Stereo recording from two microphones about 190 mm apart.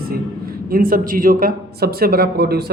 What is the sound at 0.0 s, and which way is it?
Speech, 50° right (ahead or behind).